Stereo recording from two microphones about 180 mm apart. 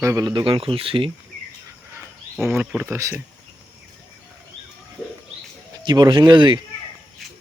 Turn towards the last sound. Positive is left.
turn(degrees=-25)  # may be behind; listen again after turning